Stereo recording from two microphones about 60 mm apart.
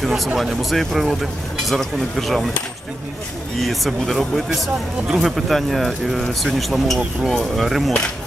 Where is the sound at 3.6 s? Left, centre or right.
Centre.